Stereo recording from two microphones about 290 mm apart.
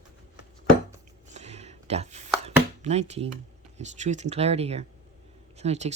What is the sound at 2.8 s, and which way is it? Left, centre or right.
Speech, right.